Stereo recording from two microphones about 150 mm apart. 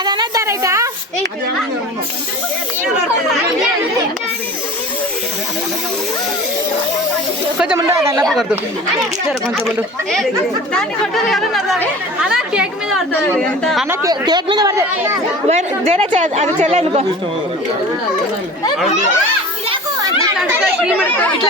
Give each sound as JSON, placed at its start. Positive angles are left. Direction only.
{"t": 0.0, "sound": "a sound", "side_deg": -30}
{"t": 0.4, "sound": "speech", "side_deg": -20}
{"t": 7.8, "sound": "speech", "side_deg": -20}
{"t": 8.2, "sound": "speech", "side_deg": 0}
{"t": 10.8, "sound": "speech", "side_deg": 5}
{"t": 14.0, "sound": "speech", "side_deg": -25}
{"t": 15.4, "sound": "a woman's voice", "side_deg": -45}
{"t": 21.0, "sound": "speech", "side_deg": 10}